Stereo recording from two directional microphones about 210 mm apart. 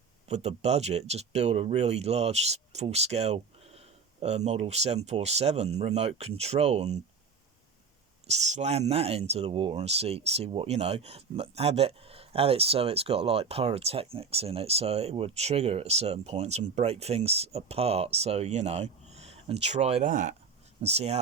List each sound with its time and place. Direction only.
0.3 s speech: 30° right (ahead or behind)
8.3 s speech: 30° right (ahead or behind)